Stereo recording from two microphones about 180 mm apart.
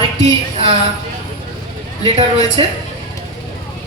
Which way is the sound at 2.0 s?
30° right (ahead or behind).